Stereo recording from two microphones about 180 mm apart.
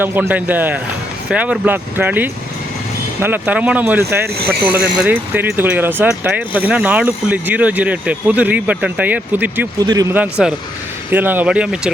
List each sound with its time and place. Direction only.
0.0 s speech: 10° right (ahead or behind)
4.4 s speech: 60° right (ahead or behind)
4.7 s speech: 10° right (ahead or behind)
9.8 s speech: 20° right (ahead or behind)
10.2 s speech: 5° right (ahead or behind)